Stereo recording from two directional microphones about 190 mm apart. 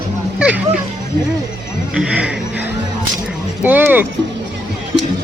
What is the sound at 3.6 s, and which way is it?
Speech, 10° right (ahead or behind).